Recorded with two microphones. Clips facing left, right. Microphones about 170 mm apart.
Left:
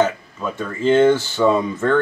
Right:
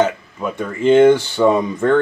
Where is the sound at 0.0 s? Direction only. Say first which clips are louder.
Right 1 dB; 15° right (ahead or behind).